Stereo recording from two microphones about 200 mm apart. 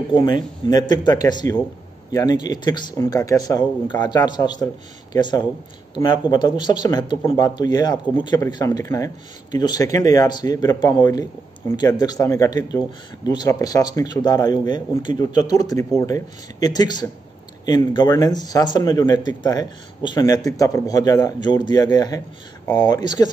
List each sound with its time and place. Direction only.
0.1 s speech: 25° left (ahead or behind)